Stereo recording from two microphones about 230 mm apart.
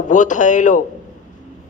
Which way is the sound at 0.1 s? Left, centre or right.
Left.